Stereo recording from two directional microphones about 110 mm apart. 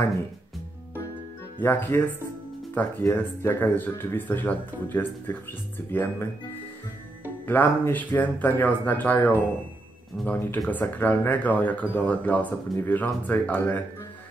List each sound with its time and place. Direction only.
1.6 s speech: 20° left (ahead or behind)
7.4 s speech: 20° left (ahead or behind)